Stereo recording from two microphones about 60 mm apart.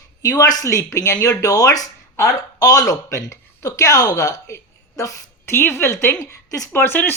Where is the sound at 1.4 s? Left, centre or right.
Left.